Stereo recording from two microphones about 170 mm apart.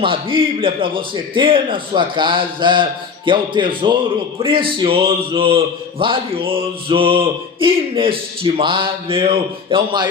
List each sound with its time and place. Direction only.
0.0 s a man's voice: 30° right (ahead or behind)